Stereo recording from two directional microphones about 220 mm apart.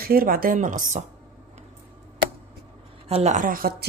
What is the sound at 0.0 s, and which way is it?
Speech, 40° right (ahead or behind).